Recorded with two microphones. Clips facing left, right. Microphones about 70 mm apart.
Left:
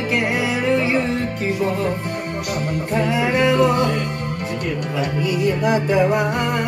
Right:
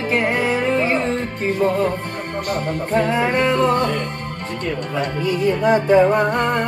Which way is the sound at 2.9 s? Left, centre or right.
Right.